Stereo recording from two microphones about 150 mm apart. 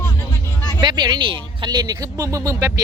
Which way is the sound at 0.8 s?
30° right (ahead or behind).